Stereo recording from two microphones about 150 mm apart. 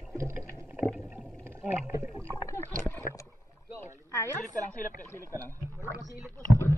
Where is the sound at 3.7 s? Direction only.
20° left (ahead or behind).